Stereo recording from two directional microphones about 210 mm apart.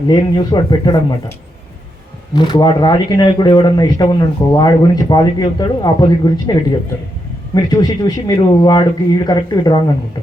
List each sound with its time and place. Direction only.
0.1 s speech: 20° left (ahead or behind)
2.3 s speech: 20° left (ahead or behind)